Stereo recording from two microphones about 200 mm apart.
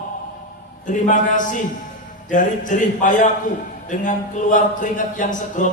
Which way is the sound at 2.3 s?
40° left (ahead or behind).